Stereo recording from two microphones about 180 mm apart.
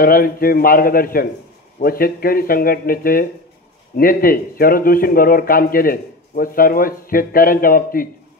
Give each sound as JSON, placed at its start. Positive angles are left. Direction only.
{"t": 0.0, "sound": "speech", "side_deg": 55}